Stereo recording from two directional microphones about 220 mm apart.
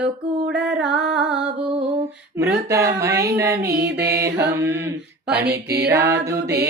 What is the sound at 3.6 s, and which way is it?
Mantra, 45° right (ahead or behind).